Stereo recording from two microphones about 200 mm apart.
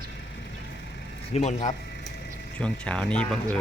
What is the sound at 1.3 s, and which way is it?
Speech, 30° left (ahead or behind).